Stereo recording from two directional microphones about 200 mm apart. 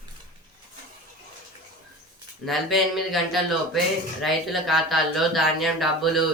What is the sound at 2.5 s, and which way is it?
Speech, centre (ahead or behind).